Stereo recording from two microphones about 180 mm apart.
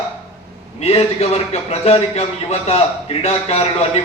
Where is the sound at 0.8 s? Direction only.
35° left (ahead or behind).